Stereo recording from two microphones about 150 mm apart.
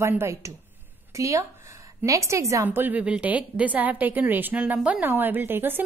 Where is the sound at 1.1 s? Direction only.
20° right (ahead or behind).